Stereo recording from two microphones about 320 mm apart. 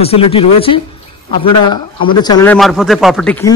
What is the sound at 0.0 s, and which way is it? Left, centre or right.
Speech, centre.